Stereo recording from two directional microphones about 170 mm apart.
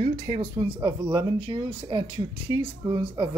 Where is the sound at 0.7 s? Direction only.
30° right (ahead or behind).